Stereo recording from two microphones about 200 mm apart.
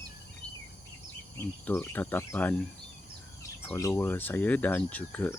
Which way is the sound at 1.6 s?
10° left (ahead or behind).